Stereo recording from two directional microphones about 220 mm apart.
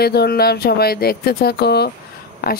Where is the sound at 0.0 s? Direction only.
45° left (ahead or behind).